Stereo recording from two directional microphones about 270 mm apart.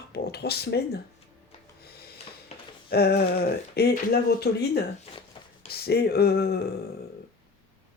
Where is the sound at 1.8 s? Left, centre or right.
Left.